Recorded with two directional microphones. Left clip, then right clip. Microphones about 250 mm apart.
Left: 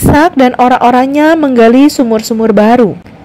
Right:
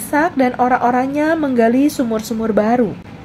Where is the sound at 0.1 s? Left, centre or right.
Left.